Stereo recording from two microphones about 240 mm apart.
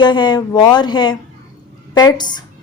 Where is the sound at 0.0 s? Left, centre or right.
Centre.